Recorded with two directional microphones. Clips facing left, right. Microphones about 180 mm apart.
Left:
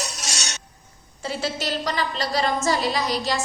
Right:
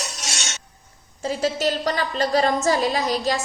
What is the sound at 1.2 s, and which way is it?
A woman's voice, 45° right (ahead or behind).